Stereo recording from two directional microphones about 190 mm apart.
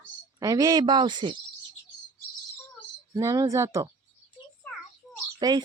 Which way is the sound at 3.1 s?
15° right (ahead or behind).